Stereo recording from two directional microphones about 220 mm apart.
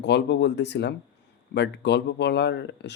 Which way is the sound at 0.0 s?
50° left (ahead or behind).